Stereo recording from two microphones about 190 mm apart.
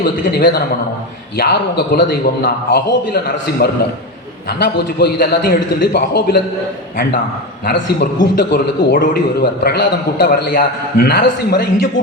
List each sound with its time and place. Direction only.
0.0 s a man's voice: 60° left (ahead or behind)
8.4 s a man's voice: 55° left (ahead or behind)